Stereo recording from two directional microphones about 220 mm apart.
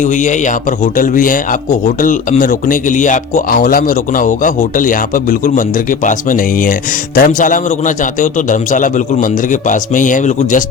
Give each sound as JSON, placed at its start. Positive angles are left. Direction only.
{"t": 0.0, "sound": "speech", "side_deg": 35}